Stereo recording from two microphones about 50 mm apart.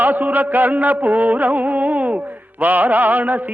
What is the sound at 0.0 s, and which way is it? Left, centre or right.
Music, right.